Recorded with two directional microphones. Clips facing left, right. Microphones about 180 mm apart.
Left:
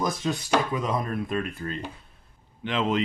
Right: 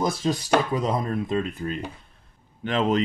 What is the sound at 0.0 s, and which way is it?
Speech, 30° right (ahead or behind).